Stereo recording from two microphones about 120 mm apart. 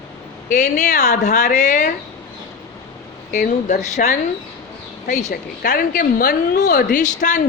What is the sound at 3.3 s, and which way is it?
Speech, 80° left.